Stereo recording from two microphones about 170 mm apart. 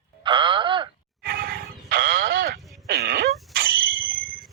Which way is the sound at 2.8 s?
65° right (ahead or behind).